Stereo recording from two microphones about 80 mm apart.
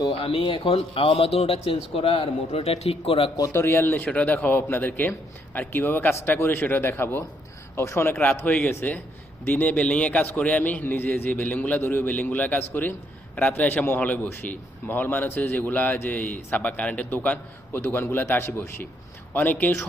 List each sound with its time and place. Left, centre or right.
0.1 s a man's voice: left
3.4 s a man's voice: left